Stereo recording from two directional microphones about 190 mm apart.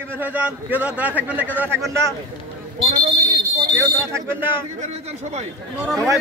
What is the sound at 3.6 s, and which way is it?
Speech, 15° right (ahead or behind).